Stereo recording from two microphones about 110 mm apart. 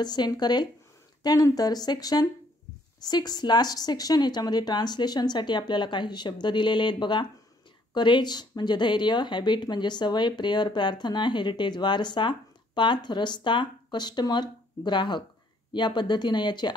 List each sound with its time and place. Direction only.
0.0 s speech: 40° left (ahead or behind)